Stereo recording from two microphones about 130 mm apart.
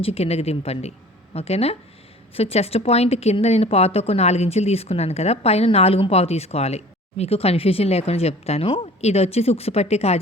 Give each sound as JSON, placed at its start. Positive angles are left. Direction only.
{"t": 0.0, "sound": "a woman's voice", "side_deg": 50}